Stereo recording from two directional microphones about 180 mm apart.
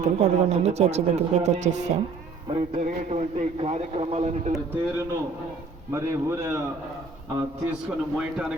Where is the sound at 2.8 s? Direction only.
40° right (ahead or behind).